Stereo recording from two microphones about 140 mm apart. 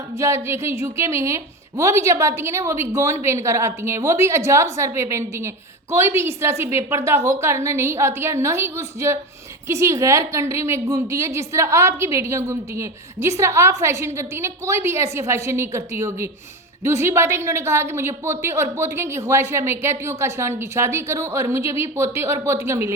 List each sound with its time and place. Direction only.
0.2 s a woman's voice: 20° right (ahead or behind)